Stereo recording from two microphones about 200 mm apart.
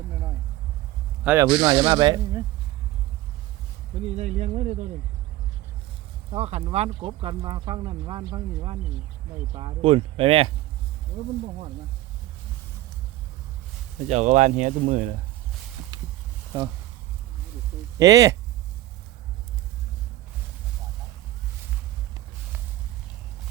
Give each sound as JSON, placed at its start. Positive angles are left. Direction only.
{"t": 1.2, "sound": "speech", "side_deg": -5}
{"t": 1.6, "sound": "speech", "side_deg": -25}
{"t": 4.0, "sound": "speech", "side_deg": -35}
{"t": 6.3, "sound": "speech", "side_deg": -30}
{"t": 14.1, "sound": "speech", "side_deg": -35}
{"t": 15.9, "sound": "a sound", "side_deg": -20}
{"t": 17.9, "sound": "speech", "side_deg": -15}